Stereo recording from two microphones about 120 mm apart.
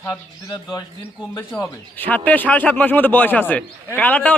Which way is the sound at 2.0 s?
15° left (ahead or behind).